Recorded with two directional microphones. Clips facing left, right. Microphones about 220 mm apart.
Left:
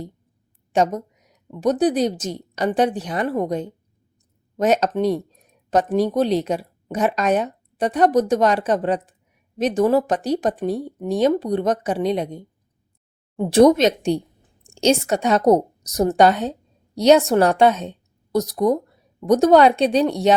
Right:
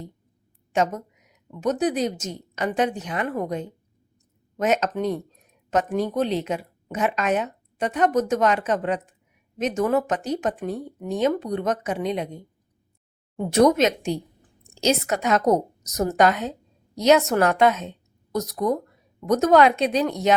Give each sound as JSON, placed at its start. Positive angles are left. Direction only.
{"t": 0.7, "sound": "a sound", "side_deg": 35}
{"t": 1.6, "sound": "speech", "side_deg": 35}
{"t": 13.5, "sound": "a woman's voice", "side_deg": 30}